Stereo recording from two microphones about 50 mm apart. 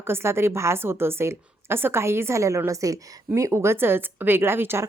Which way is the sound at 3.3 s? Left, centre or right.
Right.